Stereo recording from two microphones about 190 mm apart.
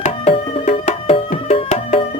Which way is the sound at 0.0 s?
35° left (ahead or behind).